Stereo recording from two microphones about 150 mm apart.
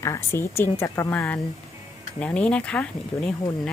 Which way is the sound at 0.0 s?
20° left (ahead or behind).